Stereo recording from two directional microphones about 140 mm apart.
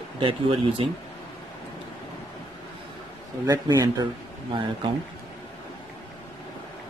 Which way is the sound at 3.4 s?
25° right (ahead or behind).